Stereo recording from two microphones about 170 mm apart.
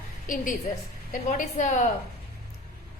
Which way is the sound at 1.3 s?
45° left (ahead or behind).